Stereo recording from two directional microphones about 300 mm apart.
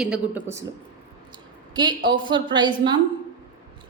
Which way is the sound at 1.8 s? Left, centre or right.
Centre.